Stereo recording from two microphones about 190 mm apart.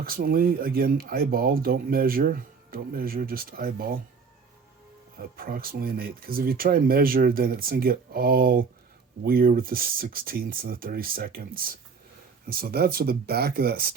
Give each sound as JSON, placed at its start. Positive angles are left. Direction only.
{"t": 0.0, "sound": "speech", "side_deg": -50}
{"t": 5.1, "sound": "speech", "side_deg": -50}